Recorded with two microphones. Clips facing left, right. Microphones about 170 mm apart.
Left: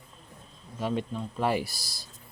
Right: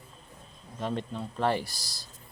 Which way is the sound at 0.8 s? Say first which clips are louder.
Left 2 dB; 5° left (ahead or behind).